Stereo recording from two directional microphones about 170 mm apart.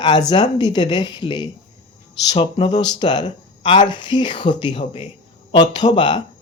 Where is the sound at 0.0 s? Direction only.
25° left (ahead or behind).